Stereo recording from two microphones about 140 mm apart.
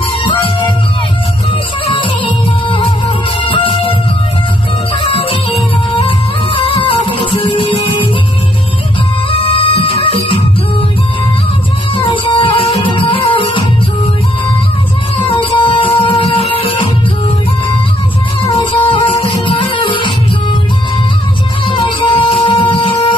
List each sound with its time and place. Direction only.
2.0 s music: 35° left (ahead or behind)
5.0 s music: 40° left (ahead or behind)
9.3 s music: 40° left (ahead or behind)
12.1 s music: 35° left (ahead or behind)
15.2 s music: 35° left (ahead or behind)
18.6 s music: 35° left (ahead or behind)
21.6 s music: 35° left (ahead or behind)